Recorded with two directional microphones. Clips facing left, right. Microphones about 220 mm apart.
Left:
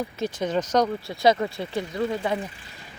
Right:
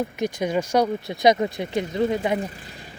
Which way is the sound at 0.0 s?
15° right (ahead or behind).